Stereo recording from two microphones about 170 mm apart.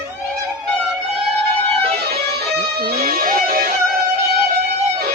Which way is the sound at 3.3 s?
60° right (ahead or behind).